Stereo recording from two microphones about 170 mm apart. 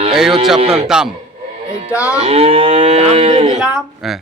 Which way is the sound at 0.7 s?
5° right (ahead or behind).